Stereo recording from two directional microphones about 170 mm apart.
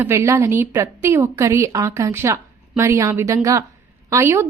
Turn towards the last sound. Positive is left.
turn(degrees=-15)  # may be behind; listen again after turning